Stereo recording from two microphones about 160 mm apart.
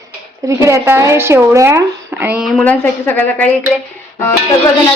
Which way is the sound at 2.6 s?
10° left (ahead or behind).